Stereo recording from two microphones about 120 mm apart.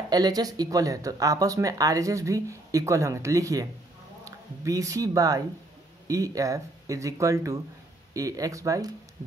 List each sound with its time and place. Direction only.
0.1 s speech: 30° right (ahead or behind)